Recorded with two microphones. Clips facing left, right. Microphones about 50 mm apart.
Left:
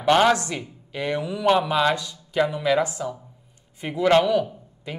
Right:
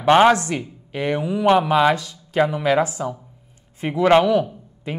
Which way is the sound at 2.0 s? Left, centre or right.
Right.